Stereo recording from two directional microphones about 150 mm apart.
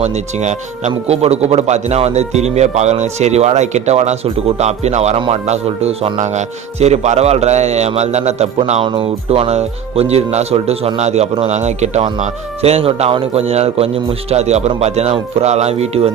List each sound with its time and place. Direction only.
0.0 s speech: 50° right (ahead or behind)
8.9 s speech: 35° right (ahead or behind)